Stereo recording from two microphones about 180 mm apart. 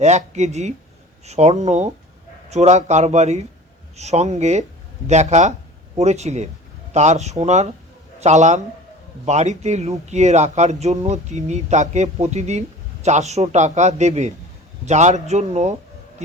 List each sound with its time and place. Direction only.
0.0 s speech: 40° right (ahead or behind)